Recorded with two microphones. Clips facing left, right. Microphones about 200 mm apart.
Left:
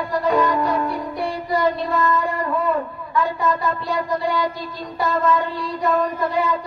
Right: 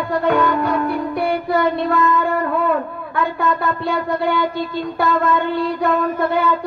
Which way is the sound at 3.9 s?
65° right (ahead or behind).